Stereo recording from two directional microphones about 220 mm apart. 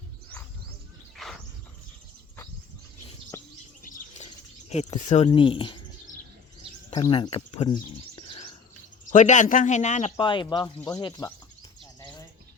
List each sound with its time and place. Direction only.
1.1 s bird: centre (ahead or behind)
3.3 s bird: 10° left (ahead or behind)
4.7 s speech: 30° left (ahead or behind)
6.9 s speech: 20° left (ahead or behind)
9.0 s speech: 35° left (ahead or behind); by 11.3 s 15° left (ahead or behind)